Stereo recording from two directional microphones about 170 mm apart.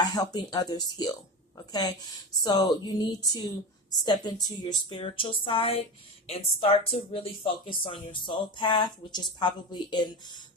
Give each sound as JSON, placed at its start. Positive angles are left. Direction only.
{"t": 0.0, "sound": "speech", "side_deg": 25}